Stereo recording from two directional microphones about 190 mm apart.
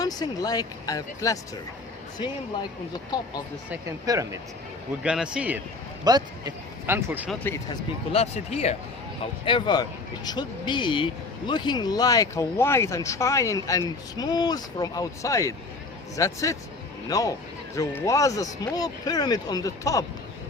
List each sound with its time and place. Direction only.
0.0 s speech: 20° left (ahead or behind)
3.7 s speech: 20° right (ahead or behind)
5.0 s a man's voice: 5° right (ahead or behind)
6.1 s speech: 20° right (ahead or behind)
7.3 s speech: 10° left (ahead or behind)
8.1 s speech: 35° left (ahead or behind); by 20.1 s 15° left (ahead or behind)